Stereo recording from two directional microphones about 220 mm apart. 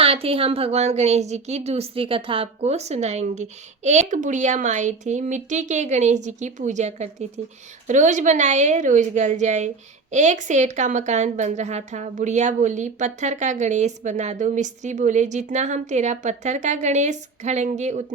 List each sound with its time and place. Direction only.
0.0 s a woman's voice: 25° right (ahead or behind)